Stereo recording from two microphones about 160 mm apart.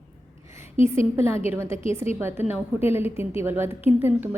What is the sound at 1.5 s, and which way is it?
A woman's voice, 15° right (ahead or behind).